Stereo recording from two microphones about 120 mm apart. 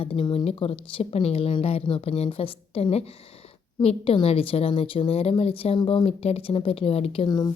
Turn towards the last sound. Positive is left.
turn(degrees=35)  # may be behind; listen again after turning